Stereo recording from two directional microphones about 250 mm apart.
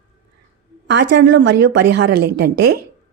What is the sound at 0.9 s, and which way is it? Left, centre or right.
Speech, right.